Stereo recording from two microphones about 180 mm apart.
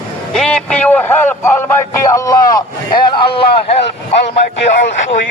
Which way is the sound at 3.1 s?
30° left (ahead or behind).